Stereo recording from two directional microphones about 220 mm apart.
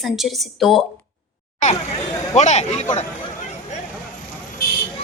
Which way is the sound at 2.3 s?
30° left (ahead or behind).